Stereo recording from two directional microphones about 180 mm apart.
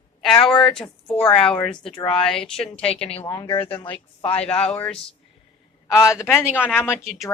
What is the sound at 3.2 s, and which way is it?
Speech, 20° left (ahead or behind).